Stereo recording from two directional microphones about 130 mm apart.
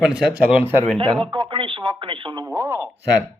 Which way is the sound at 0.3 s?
10° right (ahead or behind).